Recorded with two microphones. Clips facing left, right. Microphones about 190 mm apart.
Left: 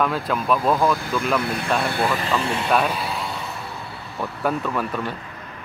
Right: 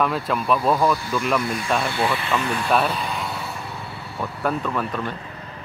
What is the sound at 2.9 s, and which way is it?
Music, 5° left (ahead or behind).